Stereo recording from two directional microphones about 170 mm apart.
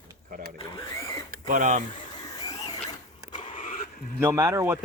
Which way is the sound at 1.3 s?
50° right (ahead or behind).